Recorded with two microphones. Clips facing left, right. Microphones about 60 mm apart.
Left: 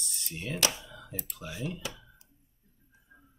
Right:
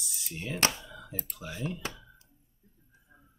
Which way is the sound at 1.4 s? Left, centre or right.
Centre.